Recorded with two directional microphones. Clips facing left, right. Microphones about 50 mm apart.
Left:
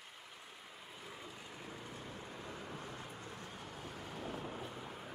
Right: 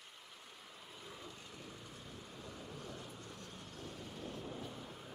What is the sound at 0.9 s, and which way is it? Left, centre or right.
Vehicle, centre.